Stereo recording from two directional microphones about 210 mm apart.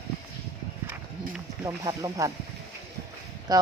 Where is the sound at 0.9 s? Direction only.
10° right (ahead or behind).